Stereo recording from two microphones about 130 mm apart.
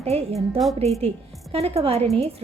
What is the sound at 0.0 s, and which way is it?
Speech, 50° right (ahead or behind).